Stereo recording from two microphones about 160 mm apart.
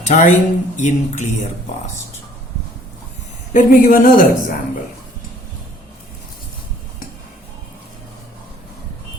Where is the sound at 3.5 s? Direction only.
55° left (ahead or behind).